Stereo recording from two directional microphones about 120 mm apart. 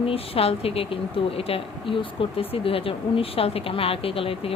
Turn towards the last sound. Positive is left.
turn(degrees=50)  # may be behind; listen again after turning